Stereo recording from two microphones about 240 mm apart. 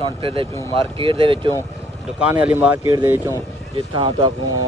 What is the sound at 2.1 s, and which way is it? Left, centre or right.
Speech, centre.